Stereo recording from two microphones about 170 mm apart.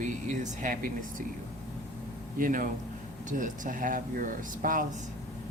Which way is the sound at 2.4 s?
50° right (ahead or behind).